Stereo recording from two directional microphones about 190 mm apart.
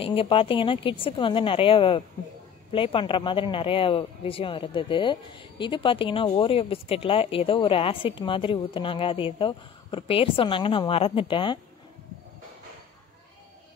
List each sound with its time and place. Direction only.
0.0 s speech: 30° left (ahead or behind)